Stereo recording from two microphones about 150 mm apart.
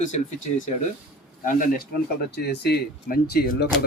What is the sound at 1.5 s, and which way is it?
Speech, 65° left (ahead or behind).